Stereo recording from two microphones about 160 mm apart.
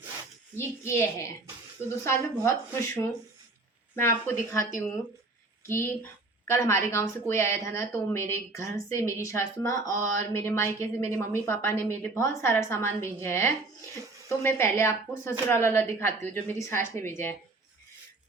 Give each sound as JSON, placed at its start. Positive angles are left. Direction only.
{"t": 0.5, "sound": "a woman's voice", "side_deg": 15}